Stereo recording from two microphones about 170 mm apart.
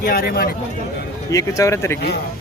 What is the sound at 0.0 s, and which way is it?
Speech, 60° left (ahead or behind).